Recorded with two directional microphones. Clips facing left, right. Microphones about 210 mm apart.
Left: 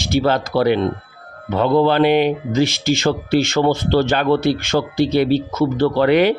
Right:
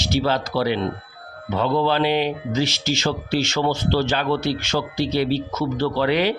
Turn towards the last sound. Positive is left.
turn(degrees=55)  # may be behind; listen again after turning